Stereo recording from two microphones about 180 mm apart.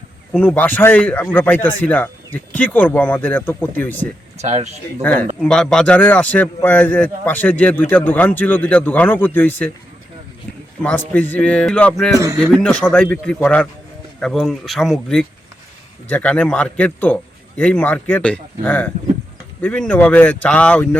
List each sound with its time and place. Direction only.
0.3 s a man's voice: 10° left (ahead or behind)
4.4 s speech: 40° right (ahead or behind)
5.0 s a man's voice: 10° left (ahead or behind)
10.8 s a man's voice: 10° left (ahead or behind)
12.1 s speech: 20° right (ahead or behind)
12.6 s a man's voice: 5° left (ahead or behind)